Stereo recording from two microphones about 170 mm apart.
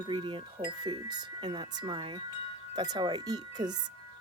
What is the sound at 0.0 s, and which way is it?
Speech, 30° right (ahead or behind).